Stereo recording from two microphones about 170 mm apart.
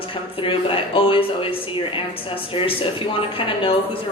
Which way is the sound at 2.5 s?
30° left (ahead or behind).